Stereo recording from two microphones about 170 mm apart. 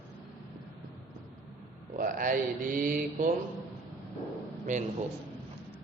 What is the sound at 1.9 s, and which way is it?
Speech, 55° right (ahead or behind).